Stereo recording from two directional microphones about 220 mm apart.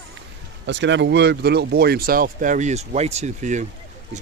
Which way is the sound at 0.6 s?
55° right (ahead or behind).